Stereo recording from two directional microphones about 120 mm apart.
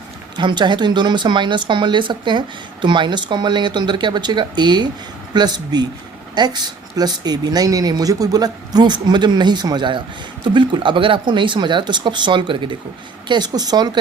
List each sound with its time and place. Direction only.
0.3 s speech: 40° right (ahead or behind)